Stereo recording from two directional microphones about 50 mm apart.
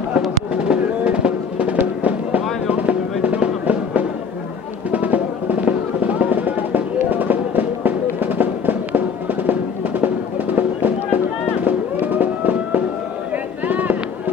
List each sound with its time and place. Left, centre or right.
0.7 s music: right
2.0 s fireworks: right
4.9 s music: right
13.7 s a sound: right